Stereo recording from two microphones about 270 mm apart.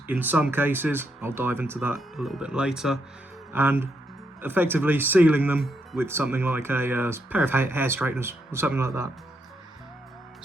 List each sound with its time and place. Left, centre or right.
0.1 s speech: centre